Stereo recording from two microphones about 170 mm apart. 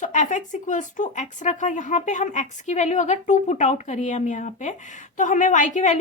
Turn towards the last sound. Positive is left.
turn(degrees=45)  # may be behind; listen again after turning